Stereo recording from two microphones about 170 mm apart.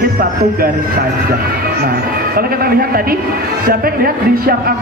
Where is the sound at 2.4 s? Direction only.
60° right (ahead or behind).